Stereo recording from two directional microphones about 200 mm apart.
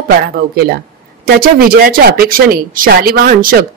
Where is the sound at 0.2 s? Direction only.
50° right (ahead or behind).